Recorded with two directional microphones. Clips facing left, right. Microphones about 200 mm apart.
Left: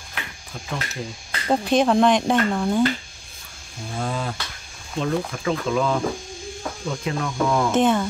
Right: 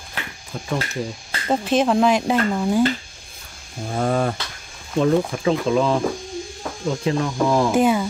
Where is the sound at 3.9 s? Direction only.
60° right (ahead or behind).